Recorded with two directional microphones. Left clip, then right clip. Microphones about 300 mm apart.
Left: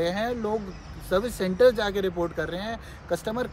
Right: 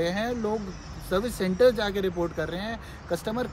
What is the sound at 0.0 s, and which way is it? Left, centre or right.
Speech, centre.